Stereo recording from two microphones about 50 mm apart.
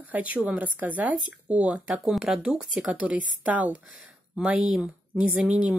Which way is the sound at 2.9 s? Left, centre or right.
Right.